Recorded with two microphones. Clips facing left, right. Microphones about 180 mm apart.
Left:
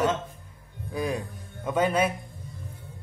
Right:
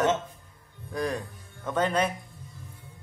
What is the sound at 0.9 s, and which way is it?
Speech, 10° left (ahead or behind).